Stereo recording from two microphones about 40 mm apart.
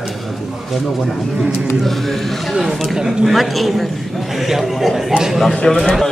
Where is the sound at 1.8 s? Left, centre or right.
Centre.